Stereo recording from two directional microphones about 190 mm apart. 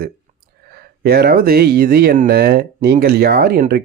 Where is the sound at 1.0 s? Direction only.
55° right (ahead or behind).